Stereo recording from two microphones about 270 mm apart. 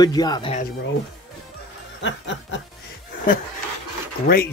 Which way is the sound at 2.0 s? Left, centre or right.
Left.